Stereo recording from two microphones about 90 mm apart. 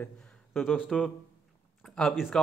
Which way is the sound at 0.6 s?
Centre (ahead or behind).